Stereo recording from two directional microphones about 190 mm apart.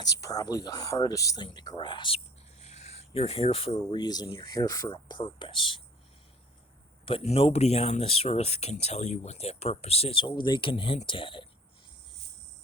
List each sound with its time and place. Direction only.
0.0 s speech: 20° left (ahead or behind)
7.0 s speech: 30° left (ahead or behind)